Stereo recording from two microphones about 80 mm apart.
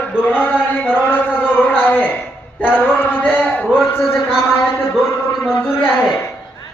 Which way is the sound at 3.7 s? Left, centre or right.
Centre.